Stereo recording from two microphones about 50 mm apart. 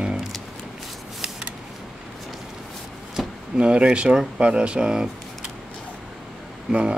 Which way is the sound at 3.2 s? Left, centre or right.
Centre.